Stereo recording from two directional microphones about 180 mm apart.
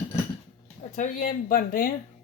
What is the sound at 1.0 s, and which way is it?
Speech, 50° left (ahead or behind).